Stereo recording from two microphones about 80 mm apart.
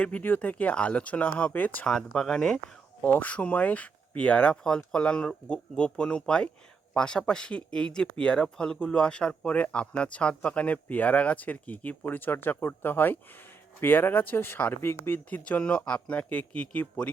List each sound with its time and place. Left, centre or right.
0.0 s speech: left
1.9 s speech: centre
3.0 s speech: centre